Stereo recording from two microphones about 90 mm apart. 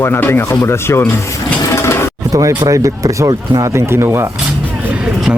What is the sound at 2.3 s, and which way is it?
Speech, 40° right (ahead or behind).